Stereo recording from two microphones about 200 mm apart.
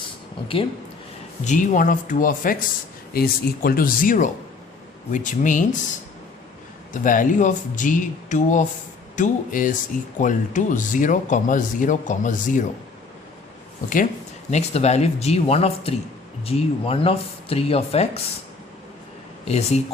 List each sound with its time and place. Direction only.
1.5 s speech: 40° left (ahead or behind)
6.9 s speech: 40° left (ahead or behind)
14.5 s speech: 35° left (ahead or behind)
19.5 s speech: 30° left (ahead or behind)